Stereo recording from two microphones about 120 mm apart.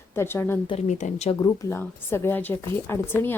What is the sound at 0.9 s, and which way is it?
Speech, 85° left.